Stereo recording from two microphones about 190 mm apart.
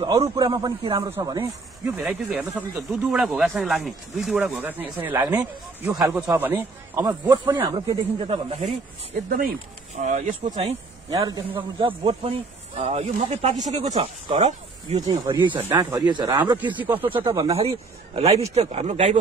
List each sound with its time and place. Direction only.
0.0 s a man's voice: 20° right (ahead or behind)
2.0 s speech: 5° right (ahead or behind)
7.7 s speech: 30° right (ahead or behind)
9.1 s speech: 55° right (ahead or behind)
9.9 s speech: 40° right (ahead or behind)
11.1 s a man's voice: 20° right (ahead or behind)
15.0 s a man's voice: 20° right (ahead or behind)